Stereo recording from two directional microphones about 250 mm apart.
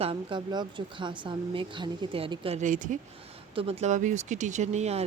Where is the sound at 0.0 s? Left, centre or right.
Right.